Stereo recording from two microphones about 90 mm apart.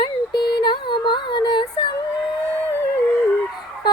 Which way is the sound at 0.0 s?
60° left (ahead or behind).